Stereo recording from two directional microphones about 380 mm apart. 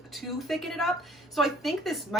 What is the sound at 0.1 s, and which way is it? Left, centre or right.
Speech, centre.